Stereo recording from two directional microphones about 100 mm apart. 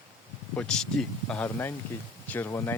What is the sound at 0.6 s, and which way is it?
Speech, 10° left (ahead or behind).